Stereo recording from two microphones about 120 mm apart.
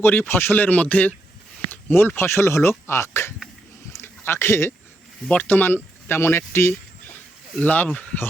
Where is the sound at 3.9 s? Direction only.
20° left (ahead or behind).